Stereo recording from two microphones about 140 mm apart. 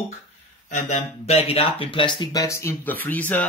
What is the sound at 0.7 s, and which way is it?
Speech, 60° left (ahead or behind).